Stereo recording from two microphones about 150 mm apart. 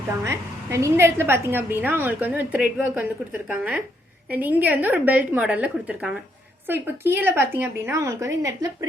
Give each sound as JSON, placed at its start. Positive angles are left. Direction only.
{"t": 0.3, "sound": "a woman's voice", "side_deg": -20}